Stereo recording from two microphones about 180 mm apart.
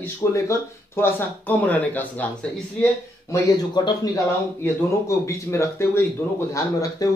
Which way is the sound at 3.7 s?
20° left (ahead or behind).